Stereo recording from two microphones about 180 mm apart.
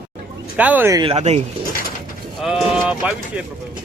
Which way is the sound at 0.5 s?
10° right (ahead or behind).